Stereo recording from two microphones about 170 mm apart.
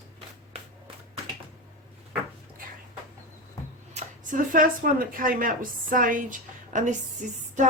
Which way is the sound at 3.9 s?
45° right (ahead or behind).